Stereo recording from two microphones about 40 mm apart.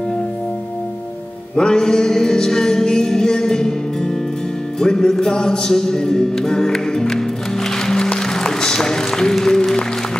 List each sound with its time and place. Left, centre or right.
1.5 s music: centre